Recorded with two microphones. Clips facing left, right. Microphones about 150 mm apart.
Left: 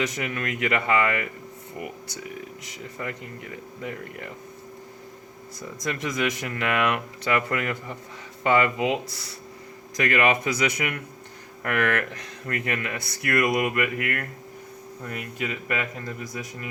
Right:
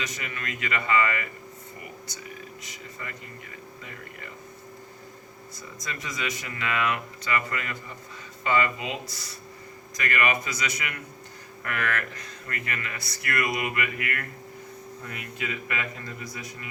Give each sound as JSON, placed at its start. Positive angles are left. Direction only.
{"t": 0.0, "sound": "speech", "side_deg": 65}
{"t": 2.6, "sound": "speech", "side_deg": 65}
{"t": 5.8, "sound": "speech", "side_deg": 60}